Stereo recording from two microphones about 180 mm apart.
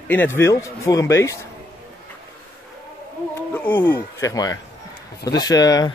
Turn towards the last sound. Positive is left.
turn(degrees=20)  # may be behind; listen again after turning